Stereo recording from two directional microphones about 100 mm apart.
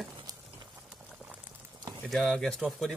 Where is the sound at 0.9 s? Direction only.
10° right (ahead or behind).